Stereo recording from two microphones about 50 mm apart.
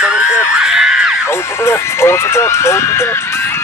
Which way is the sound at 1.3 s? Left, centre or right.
Left.